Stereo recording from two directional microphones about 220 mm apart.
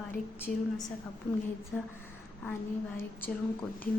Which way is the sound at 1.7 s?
10° left (ahead or behind).